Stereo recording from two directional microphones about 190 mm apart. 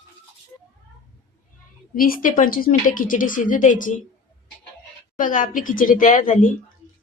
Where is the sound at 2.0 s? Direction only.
45° left (ahead or behind).